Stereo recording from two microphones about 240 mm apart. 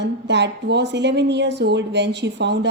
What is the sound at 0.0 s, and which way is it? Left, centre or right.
A woman's voice, right.